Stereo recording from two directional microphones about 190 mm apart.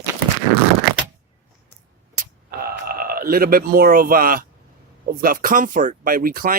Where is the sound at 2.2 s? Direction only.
50° right (ahead or behind).